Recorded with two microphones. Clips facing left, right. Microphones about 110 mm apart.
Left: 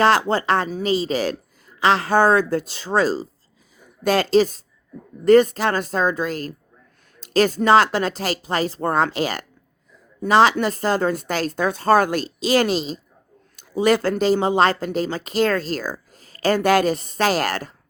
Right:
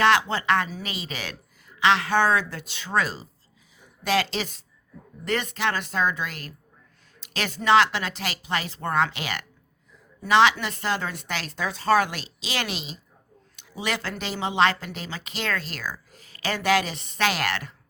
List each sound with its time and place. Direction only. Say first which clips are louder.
0.0 s speech: left 4 dB; 40° left (ahead or behind)
3.8 s speech: left 5 dB; 45° left (ahead or behind)